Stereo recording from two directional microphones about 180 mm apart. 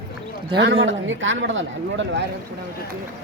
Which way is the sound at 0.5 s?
85° right.